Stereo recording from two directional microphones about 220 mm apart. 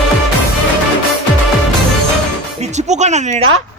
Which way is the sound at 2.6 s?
30° right (ahead or behind).